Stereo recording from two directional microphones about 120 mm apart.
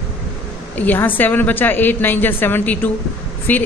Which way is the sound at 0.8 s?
15° left (ahead or behind).